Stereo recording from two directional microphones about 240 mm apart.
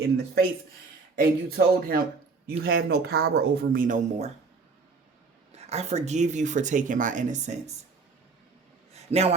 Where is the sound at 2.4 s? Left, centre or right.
Right.